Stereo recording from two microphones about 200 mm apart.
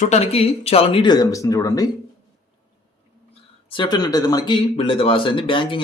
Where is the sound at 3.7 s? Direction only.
20° left (ahead or behind).